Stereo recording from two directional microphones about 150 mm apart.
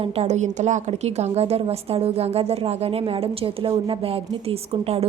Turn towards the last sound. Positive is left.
turn(degrees=-40)  # may be behind; listen again after turning